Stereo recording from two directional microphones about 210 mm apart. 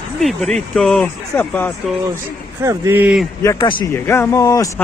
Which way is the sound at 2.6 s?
10° right (ahead or behind).